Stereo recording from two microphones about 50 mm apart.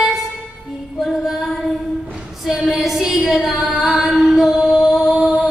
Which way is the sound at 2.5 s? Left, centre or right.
Centre.